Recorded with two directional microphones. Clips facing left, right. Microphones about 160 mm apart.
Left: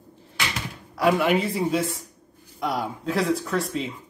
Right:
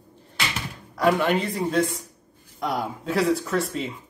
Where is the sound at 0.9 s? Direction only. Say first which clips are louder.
Even; 5° left (ahead or behind).